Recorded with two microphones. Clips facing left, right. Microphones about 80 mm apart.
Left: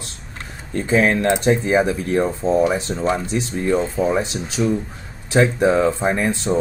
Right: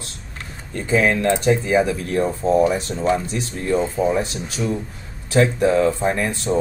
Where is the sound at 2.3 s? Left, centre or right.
Centre.